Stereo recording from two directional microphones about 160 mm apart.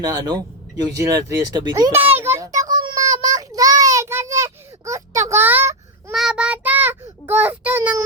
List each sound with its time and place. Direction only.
0.0 s speech: 25° right (ahead or behind)
2.6 s child singing: 25° right (ahead or behind)
5.3 s a sound: 15° right (ahead or behind)
6.1 s child singing: 5° right (ahead or behind)